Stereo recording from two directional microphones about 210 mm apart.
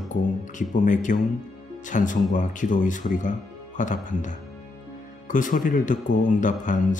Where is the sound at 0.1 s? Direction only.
35° left (ahead or behind).